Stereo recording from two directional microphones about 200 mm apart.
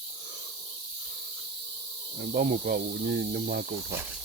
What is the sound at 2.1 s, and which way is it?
Insect, 50° right (ahead or behind).